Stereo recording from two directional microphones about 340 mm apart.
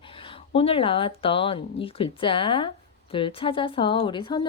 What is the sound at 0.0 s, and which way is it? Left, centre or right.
Speech, centre.